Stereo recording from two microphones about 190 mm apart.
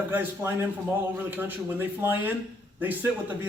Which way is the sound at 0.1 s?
10° right (ahead or behind).